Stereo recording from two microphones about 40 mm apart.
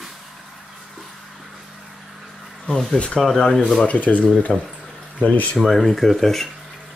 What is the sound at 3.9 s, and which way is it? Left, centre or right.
Speech, left.